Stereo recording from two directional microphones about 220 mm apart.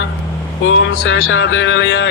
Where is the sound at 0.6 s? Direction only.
60° left (ahead or behind).